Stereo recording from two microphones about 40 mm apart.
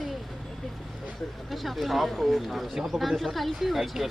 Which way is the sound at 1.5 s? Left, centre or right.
Centre.